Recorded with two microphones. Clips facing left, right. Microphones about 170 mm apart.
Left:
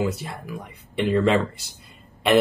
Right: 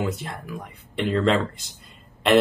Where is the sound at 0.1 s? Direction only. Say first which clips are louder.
Even; 5° left (ahead or behind).